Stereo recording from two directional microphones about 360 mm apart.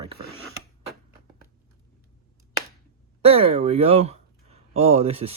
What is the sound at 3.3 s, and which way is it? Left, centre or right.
Speech, centre.